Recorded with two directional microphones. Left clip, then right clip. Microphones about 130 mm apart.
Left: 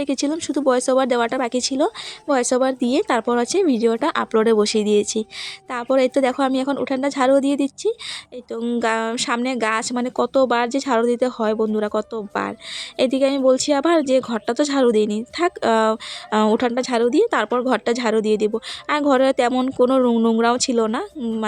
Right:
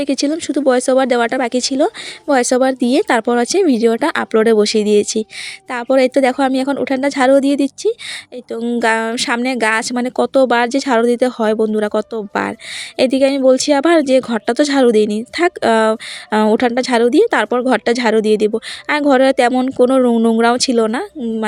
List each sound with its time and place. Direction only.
0.0 s speech: 30° right (ahead or behind)
19.5 s speech: 20° right (ahead or behind)